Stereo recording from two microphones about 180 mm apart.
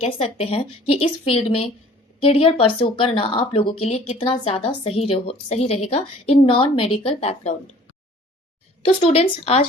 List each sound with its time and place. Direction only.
0.0 s speech: 35° left (ahead or behind)
8.8 s speech: 30° left (ahead or behind)